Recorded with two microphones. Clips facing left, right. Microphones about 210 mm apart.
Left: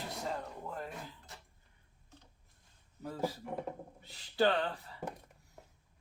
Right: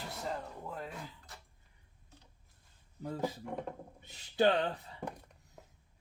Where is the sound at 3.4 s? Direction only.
5° left (ahead or behind).